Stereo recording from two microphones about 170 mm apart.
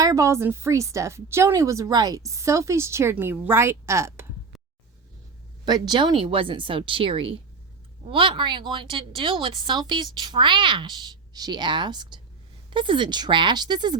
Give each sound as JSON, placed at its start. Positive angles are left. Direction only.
{"t": 0.0, "sound": "a woman's voice", "side_deg": -20}
{"t": 5.6, "sound": "a woman's voice", "side_deg": -25}